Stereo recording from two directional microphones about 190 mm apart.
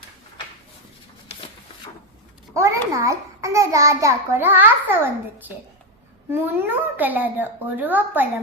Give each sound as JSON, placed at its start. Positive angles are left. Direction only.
{"t": 2.6, "sound": "a child's voice", "side_deg": -15}
{"t": 6.4, "sound": "a child's voice", "side_deg": -10}